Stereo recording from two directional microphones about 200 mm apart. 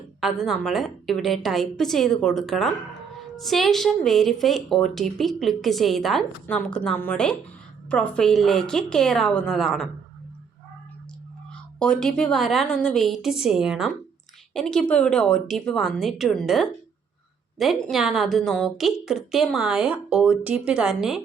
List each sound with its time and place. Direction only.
0.2 s speech: centre (ahead or behind)
11.8 s speech: 5° left (ahead or behind)